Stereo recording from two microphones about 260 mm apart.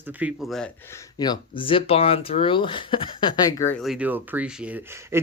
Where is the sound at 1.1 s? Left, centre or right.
Centre.